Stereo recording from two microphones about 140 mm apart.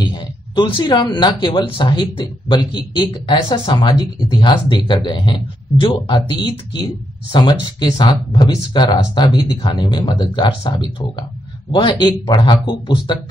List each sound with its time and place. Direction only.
0.0 s speech: 35° left (ahead or behind)